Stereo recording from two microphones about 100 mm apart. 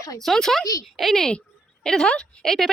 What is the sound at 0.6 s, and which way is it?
Speech, 35° left (ahead or behind).